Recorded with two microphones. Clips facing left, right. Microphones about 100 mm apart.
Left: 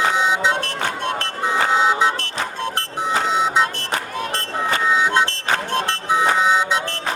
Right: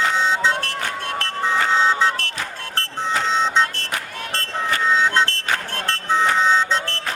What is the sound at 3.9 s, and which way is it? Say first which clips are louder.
Music: left 4 dB; 15° left (ahead or behind).